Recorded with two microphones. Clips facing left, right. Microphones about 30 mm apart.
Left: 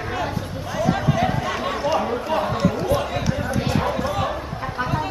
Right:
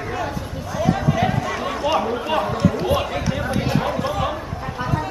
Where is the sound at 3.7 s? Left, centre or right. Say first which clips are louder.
Even; centre.